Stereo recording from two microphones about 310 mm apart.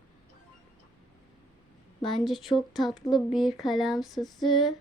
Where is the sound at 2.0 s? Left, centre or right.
Centre.